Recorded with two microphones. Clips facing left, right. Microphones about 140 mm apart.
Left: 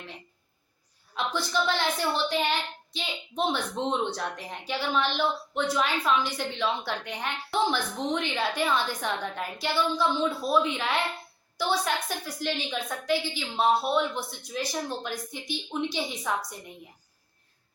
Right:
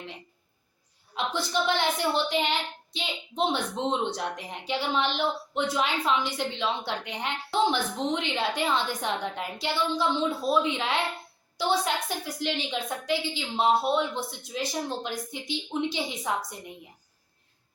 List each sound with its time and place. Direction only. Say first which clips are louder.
1.1 s a woman's voice: even; 20° right (ahead or behind)